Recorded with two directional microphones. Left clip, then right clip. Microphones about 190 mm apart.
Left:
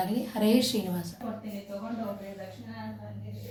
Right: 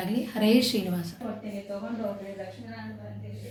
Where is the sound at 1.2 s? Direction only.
15° right (ahead or behind).